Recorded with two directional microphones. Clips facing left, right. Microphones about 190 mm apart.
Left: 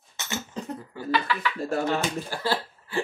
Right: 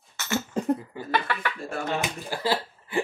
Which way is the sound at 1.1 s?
55° right (ahead or behind).